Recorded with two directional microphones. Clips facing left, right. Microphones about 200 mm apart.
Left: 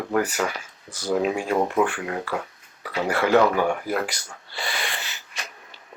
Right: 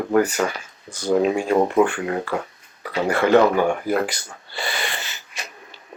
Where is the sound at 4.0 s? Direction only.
Centre (ahead or behind).